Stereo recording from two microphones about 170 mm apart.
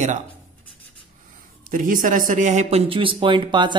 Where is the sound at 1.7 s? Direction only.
50° right (ahead or behind).